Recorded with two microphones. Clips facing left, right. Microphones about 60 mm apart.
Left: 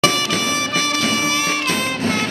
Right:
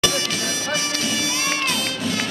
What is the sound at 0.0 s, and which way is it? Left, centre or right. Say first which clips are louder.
Bagpipes: left 5 dB; left.